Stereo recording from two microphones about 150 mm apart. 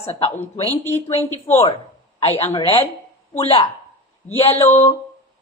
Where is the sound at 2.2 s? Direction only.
45° left (ahead or behind).